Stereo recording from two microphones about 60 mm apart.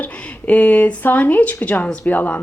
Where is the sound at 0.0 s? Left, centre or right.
Left.